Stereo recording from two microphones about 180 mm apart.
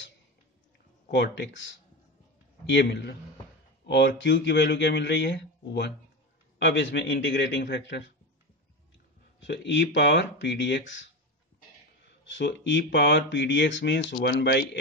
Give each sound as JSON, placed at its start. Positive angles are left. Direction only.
{"t": 1.1, "sound": "speech", "side_deg": 75}
{"t": 2.7, "sound": "speech", "side_deg": 75}
{"t": 9.4, "sound": "speech", "side_deg": 80}
{"t": 12.3, "sound": "speech", "side_deg": 90}